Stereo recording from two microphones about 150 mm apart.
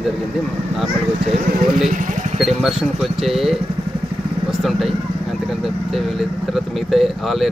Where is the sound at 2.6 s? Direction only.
Centre (ahead or behind).